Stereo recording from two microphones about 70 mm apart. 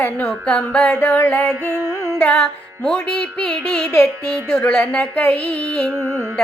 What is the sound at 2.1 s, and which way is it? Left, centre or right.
Music, left.